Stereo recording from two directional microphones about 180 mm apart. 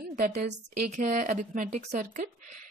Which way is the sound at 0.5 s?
40° right (ahead or behind).